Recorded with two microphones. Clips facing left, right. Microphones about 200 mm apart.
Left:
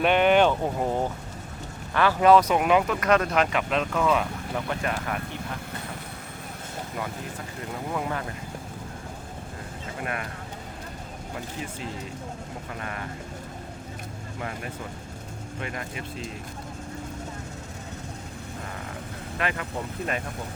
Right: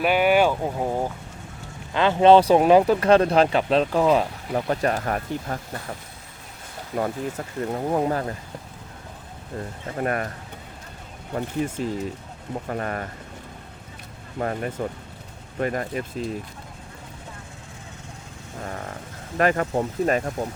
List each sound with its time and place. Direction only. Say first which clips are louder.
0.0 s speech: right 1 dB; 5° right (ahead or behind)
1.9 s speech: right 3 dB; 20° right (ahead or behind); by 5.5 s 40° right (ahead or behind)
6.9 s speech: right 10 dB; 40° right (ahead or behind)
10.0 s speech: right 8 dB; 45° right (ahead or behind)
11.3 s speech: right 10 dB; 45° right (ahead or behind)
14.3 s speech: right 9 dB; 40° right (ahead or behind)
19.4 s speech: right 9 dB; 45° right (ahead or behind)